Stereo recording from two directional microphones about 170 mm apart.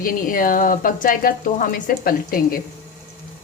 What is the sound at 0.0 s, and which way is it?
Speech, 55° left (ahead or behind).